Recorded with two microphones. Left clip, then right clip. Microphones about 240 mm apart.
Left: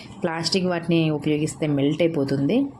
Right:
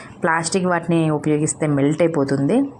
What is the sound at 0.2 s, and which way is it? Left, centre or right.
A woman's voice, centre.